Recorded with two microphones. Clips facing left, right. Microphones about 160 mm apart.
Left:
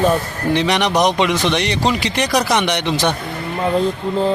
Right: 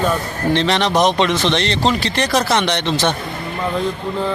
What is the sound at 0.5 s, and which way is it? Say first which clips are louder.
Speech: even; 15° left (ahead or behind).